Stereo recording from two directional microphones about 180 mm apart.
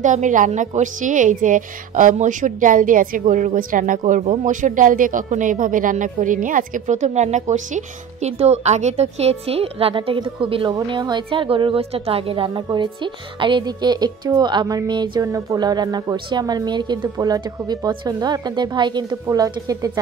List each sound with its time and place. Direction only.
0.0 s a woman's voice: 45° right (ahead or behind); by 19.9 s 20° right (ahead or behind)